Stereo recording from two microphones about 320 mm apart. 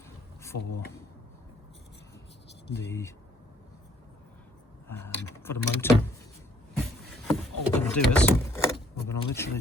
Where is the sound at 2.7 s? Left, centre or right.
Centre.